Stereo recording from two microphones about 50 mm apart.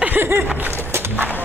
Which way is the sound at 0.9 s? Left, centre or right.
Right.